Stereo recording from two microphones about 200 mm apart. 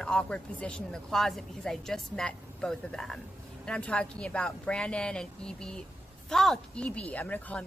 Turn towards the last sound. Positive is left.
turn(degrees=5)  # may be behind; listen again after turning